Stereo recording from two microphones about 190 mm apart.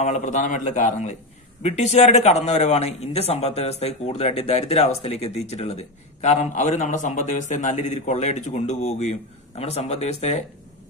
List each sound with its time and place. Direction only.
0.0 s speech: 40° left (ahead or behind)